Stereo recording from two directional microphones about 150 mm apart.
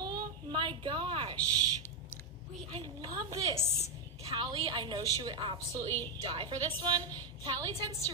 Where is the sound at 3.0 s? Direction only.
25° right (ahead or behind).